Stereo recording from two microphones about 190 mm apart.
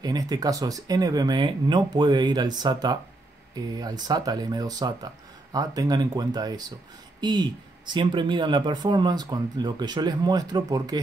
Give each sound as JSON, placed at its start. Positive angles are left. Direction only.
{"t": 0.0, "sound": "speech", "side_deg": -20}